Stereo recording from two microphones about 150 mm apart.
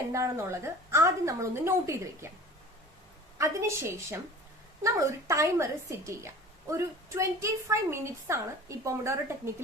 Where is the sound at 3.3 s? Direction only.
20° right (ahead or behind).